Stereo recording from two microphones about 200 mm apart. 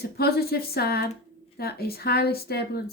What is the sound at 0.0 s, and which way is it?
Speech, 50° left (ahead or behind).